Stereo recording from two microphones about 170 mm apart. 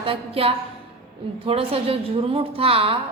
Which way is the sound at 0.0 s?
35° right (ahead or behind).